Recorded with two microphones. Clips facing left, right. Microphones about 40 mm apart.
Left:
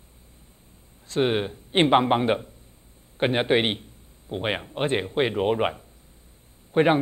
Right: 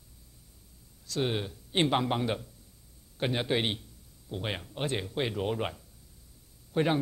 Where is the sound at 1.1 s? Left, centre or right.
Left.